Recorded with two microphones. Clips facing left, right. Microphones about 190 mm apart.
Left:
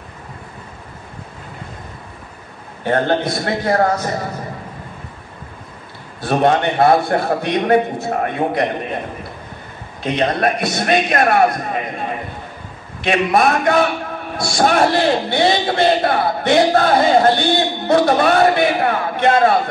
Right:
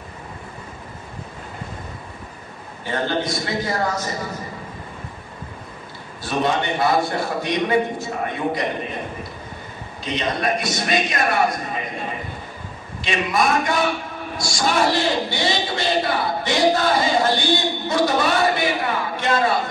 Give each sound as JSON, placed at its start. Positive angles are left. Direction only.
{"t": 2.8, "sound": "a man's voice", "side_deg": 60}
{"t": 6.2, "sound": "a man's voice", "side_deg": 55}
{"t": 10.0, "sound": "a man's voice", "side_deg": 55}
{"t": 13.0, "sound": "a man's voice", "side_deg": 60}